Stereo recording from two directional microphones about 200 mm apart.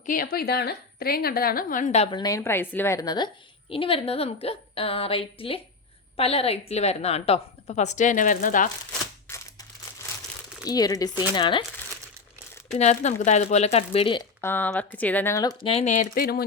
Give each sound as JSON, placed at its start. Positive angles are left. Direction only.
{"t": 0.0, "sound": "a woman's voice", "side_deg": 45}
{"t": 9.2, "sound": "a sound", "side_deg": 15}
{"t": 10.7, "sound": "a woman's voice", "side_deg": 20}
{"t": 12.7, "sound": "a woman's voice", "side_deg": 35}
{"t": 14.4, "sound": "speech", "side_deg": 10}
{"t": 15.7, "sound": "a woman's voice", "side_deg": 35}